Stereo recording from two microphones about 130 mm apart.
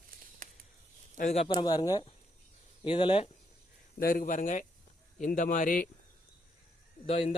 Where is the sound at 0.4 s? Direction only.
90° right.